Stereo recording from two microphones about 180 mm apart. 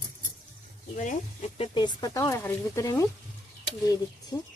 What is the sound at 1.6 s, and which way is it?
Speech, 25° left (ahead or behind).